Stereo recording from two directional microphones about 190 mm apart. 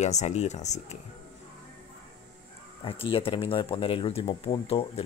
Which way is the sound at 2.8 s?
30° left (ahead or behind).